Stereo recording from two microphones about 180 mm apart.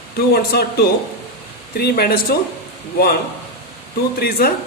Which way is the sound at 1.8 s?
60° left (ahead or behind).